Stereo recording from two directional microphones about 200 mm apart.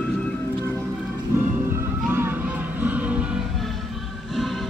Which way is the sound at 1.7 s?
10° right (ahead or behind).